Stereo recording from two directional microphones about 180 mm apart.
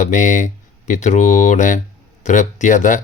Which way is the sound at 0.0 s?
45° left (ahead or behind).